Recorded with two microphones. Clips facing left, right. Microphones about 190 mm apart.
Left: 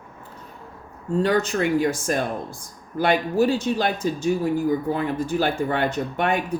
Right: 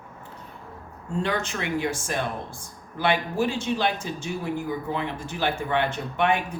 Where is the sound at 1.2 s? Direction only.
40° left (ahead or behind).